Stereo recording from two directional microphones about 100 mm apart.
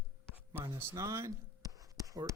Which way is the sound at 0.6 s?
30° right (ahead or behind).